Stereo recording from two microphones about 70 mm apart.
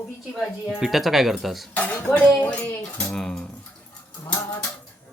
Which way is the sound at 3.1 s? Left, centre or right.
Centre.